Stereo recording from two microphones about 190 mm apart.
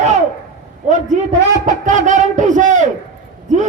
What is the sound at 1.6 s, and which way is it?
A man's voice, 40° right (ahead or behind).